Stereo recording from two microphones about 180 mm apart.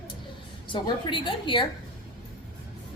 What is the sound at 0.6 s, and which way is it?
A woman's voice, 25° left (ahead or behind).